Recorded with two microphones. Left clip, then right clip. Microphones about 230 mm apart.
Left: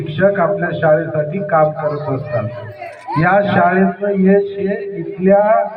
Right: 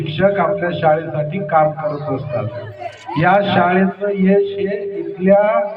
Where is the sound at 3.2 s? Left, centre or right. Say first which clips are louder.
Left 1 dB; right.